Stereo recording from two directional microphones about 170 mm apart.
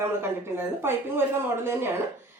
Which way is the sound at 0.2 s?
15° right (ahead or behind).